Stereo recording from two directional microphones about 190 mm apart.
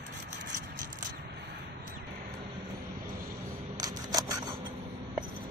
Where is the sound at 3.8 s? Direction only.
20° right (ahead or behind).